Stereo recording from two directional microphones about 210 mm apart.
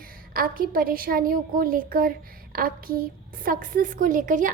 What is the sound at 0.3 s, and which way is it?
A woman's voice, 45° right (ahead or behind).